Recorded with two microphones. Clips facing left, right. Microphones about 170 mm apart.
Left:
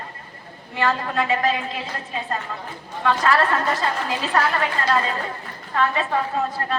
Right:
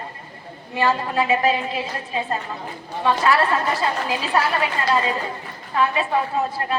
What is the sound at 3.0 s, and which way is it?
Speech, 10° right (ahead or behind).